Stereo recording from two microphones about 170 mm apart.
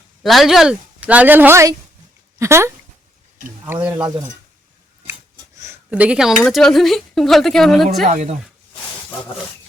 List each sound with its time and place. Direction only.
0.2 s a woman's voice: centre (ahead or behind)
5.5 s a woman's voice: 15° right (ahead or behind); by 7.9 s centre (ahead or behind)
8.0 s a woman's voice: 45° right (ahead or behind)